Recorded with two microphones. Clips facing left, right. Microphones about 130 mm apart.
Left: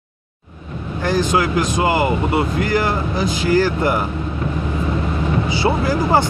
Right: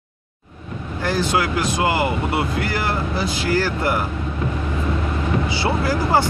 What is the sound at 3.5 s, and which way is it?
Speech, 15° left (ahead or behind).